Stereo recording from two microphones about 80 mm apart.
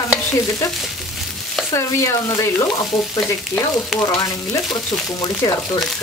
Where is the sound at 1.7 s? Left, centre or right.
Left.